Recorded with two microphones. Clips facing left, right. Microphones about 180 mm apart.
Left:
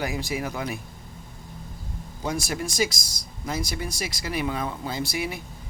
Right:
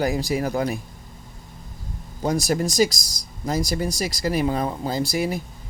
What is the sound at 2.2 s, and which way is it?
Speech, 40° right (ahead or behind).